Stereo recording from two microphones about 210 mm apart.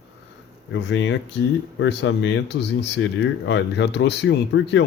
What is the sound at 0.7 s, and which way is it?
Speech, 60° left (ahead or behind).